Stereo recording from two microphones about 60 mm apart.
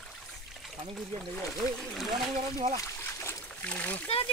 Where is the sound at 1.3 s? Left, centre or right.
Centre.